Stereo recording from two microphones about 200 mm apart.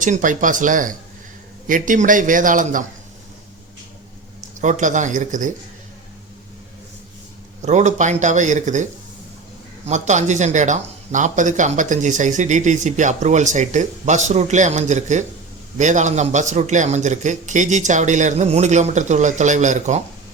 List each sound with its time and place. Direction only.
0.0 s speech: 40° right (ahead or behind)
4.6 s speech: 40° right (ahead or behind)
7.6 s speech: 35° right (ahead or behind)